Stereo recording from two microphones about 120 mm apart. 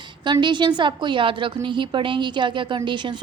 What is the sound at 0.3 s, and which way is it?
A woman's voice, 40° right (ahead or behind).